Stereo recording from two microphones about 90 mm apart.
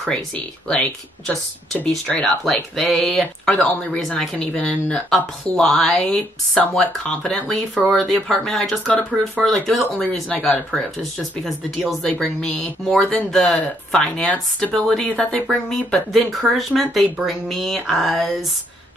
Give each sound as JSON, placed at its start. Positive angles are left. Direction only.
{"t": 0.0, "sound": "speech", "side_deg": 10}
{"t": 3.2, "sound": "speech", "side_deg": 10}
{"t": 7.7, "sound": "speech", "side_deg": 0}